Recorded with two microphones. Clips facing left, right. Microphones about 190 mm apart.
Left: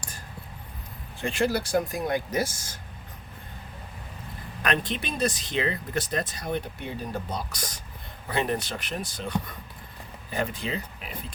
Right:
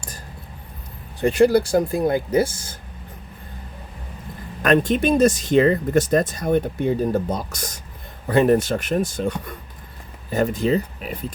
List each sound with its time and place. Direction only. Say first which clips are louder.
1.7 s speech: right 7 dB; 30° right (ahead or behind)
4.6 s speech: right 11 dB; 45° right (ahead or behind)